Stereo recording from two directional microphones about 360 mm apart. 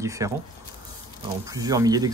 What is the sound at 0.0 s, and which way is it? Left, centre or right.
Speech, centre.